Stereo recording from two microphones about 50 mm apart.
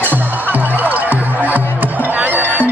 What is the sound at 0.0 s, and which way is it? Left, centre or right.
Music, right.